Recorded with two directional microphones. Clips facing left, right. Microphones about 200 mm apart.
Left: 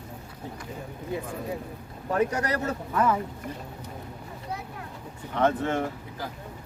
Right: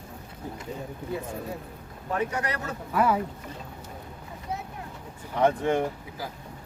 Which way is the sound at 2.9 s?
10° right (ahead or behind).